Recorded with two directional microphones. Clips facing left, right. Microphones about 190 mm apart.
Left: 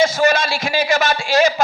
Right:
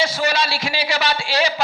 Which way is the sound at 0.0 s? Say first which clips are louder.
Left 5 dB; 45° left (ahead or behind).